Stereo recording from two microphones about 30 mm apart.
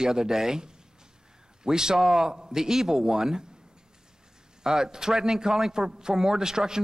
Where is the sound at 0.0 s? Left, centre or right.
Right.